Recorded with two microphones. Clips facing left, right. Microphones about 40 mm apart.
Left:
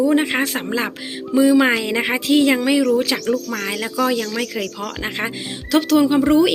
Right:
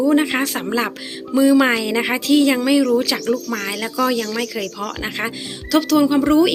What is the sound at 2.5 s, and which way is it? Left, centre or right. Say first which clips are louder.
Speech: right 1 dB; centre.